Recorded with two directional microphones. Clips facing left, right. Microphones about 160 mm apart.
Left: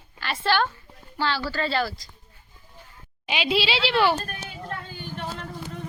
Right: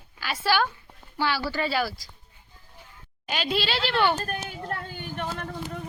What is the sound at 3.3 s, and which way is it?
Speech, 5° left (ahead or behind).